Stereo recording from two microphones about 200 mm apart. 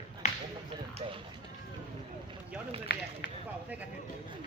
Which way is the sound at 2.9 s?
55° left (ahead or behind).